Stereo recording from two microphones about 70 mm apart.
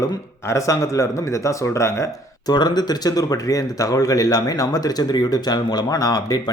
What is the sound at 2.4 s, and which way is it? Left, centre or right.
Speech, left.